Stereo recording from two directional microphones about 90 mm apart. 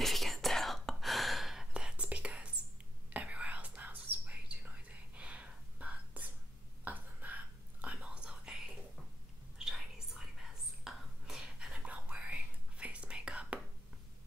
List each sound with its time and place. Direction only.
0.0 s whispering: centre (ahead or behind); by 6.3 s 15° right (ahead or behind)
6.8 s a sound: 20° right (ahead or behind)
7.8 s whispering: 15° right (ahead or behind)